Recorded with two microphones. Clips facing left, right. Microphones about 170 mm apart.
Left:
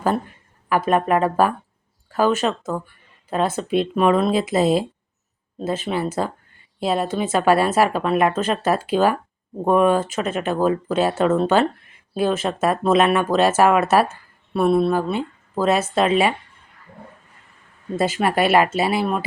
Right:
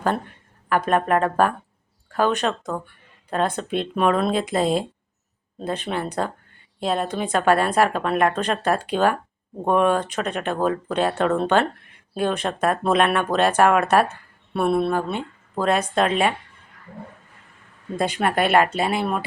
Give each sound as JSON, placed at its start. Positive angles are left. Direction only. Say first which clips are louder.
{"t": 0.7, "sound": "speech", "louder": "left 2 dB", "side_deg": 5}
{"t": 17.9, "sound": "speech", "louder": "left 2 dB", "side_deg": 5}